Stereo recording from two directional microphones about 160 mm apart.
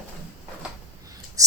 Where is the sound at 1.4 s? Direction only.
20° right (ahead or behind).